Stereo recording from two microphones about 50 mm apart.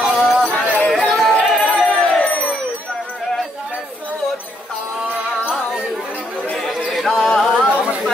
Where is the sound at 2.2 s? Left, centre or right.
Left.